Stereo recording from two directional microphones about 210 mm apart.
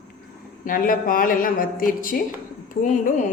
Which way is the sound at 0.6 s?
40° left (ahead or behind).